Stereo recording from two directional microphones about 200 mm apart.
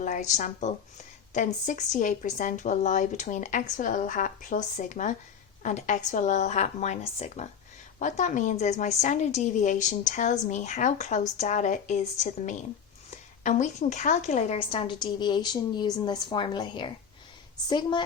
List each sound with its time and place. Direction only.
0.0 s a woman's voice: 35° left (ahead or behind); by 18.0 s 20° left (ahead or behind)